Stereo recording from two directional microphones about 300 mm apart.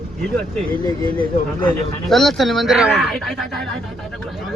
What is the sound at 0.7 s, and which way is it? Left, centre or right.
Speech, centre.